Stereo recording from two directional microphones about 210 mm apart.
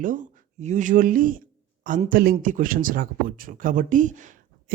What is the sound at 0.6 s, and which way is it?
Speech, 35° right (ahead or behind).